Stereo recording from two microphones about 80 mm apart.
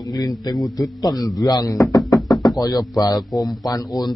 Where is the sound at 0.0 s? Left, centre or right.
Left.